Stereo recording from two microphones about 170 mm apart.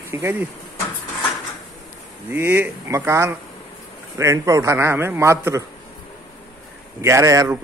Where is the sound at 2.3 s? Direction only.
15° right (ahead or behind).